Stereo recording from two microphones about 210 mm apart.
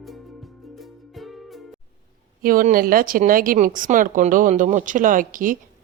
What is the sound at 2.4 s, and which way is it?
Speech, 40° right (ahead or behind).